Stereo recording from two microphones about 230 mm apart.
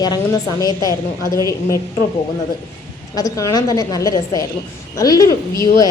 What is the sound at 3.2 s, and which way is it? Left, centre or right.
Speech, centre.